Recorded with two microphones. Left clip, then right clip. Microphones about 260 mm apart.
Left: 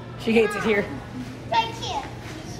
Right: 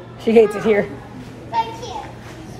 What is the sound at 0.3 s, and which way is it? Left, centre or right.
Speech, right.